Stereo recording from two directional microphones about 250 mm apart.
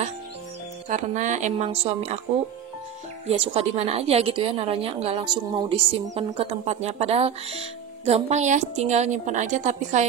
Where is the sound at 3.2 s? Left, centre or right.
Right.